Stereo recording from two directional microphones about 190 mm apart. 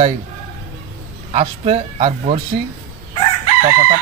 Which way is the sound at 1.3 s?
30° right (ahead or behind).